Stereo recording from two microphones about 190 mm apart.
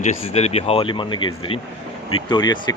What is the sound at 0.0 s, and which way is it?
Speech, 35° left (ahead or behind).